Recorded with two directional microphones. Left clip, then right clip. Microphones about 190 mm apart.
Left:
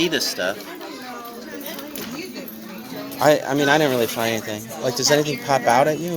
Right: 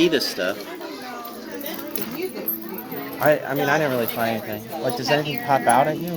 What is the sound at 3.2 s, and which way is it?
Speech, 30° left (ahead or behind).